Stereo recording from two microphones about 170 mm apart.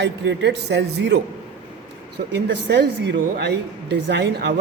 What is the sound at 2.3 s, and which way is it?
A woman's voice, 90° right.